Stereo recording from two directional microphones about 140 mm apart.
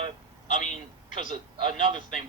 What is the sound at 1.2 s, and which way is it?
Speech, 40° right (ahead or behind).